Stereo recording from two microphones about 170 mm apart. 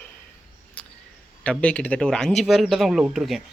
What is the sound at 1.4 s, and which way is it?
A man's voice, 5° left (ahead or behind).